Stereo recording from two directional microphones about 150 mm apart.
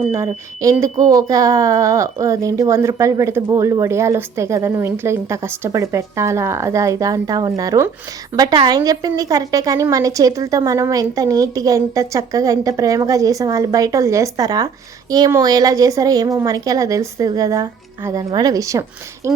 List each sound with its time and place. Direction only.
0.1 s speech: 20° right (ahead or behind)